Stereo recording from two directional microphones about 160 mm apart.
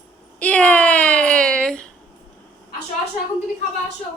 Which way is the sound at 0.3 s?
10° left (ahead or behind).